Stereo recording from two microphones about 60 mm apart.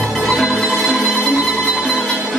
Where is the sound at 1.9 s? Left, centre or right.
Centre.